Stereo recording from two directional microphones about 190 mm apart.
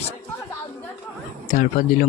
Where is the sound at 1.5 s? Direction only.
45° left (ahead or behind).